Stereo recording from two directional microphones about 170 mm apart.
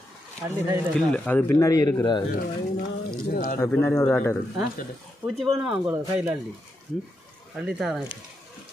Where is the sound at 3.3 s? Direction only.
55° left (ahead or behind).